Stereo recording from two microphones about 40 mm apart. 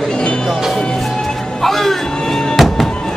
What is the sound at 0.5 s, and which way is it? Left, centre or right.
Music, centre.